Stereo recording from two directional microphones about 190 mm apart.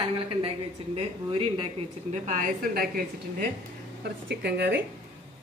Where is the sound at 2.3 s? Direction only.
45° right (ahead or behind).